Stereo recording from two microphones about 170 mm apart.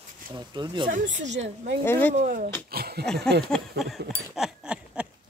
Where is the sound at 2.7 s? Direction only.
65° right (ahead or behind).